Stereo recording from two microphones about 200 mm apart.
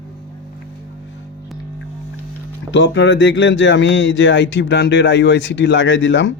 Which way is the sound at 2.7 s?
65° left (ahead or behind).